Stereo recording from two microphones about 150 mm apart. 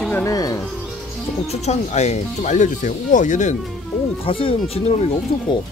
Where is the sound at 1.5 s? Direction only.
45° left (ahead or behind).